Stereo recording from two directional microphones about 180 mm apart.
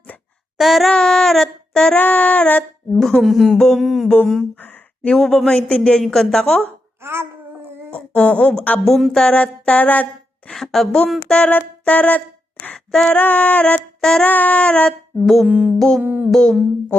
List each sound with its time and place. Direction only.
0.5 s female singing: centre (ahead or behind)
7.0 s babbling: 15° right (ahead or behind)
7.9 s female singing: 5° left (ahead or behind)
16.0 s music: 10° right (ahead or behind)
16.3 s female singing: centre (ahead or behind)